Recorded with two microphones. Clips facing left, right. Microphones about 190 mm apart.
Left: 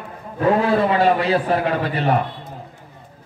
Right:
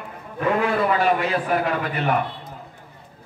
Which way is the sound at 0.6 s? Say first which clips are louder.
Left 4 dB; 30° left (ahead or behind).